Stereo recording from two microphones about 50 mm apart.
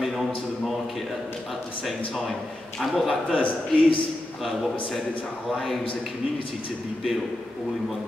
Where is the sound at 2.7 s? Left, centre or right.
Centre.